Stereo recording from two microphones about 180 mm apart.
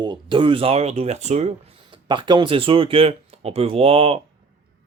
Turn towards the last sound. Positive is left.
turn(degrees=-30)  # may be behind; listen again after turning